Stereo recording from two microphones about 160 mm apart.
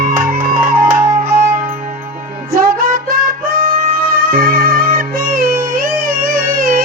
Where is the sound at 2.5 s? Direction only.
60° right (ahead or behind).